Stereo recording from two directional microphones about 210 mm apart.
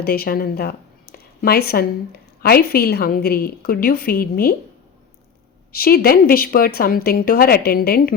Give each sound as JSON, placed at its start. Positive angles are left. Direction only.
{"t": 0.0, "sound": "a woman's voice", "side_deg": 45}
{"t": 5.7, "sound": "a woman's voice", "side_deg": 45}